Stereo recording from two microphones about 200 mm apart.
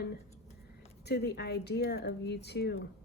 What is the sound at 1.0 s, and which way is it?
A woman's voice, 55° left (ahead or behind).